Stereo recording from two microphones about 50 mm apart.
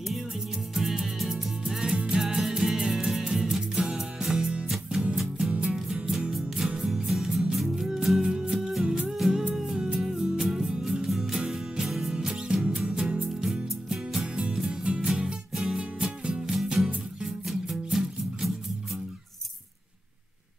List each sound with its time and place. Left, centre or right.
0.7 s music: centre
6.3 s music: centre
8.8 s music: right
9.1 s music: centre